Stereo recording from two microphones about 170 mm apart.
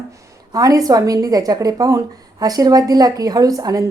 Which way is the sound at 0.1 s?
20° right (ahead or behind).